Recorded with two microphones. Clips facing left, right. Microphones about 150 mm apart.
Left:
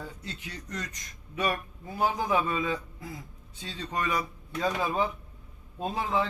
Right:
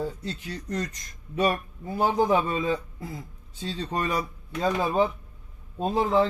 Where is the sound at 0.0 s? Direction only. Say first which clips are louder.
Right 9 dB; 35° right (ahead or behind).